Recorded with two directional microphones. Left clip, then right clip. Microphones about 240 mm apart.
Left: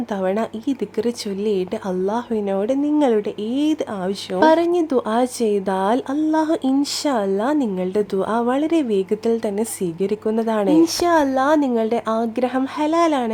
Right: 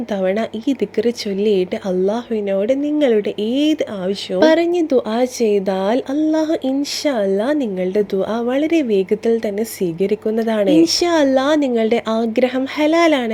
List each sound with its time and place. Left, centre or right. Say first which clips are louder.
0.2 s speech: right 3 dB; centre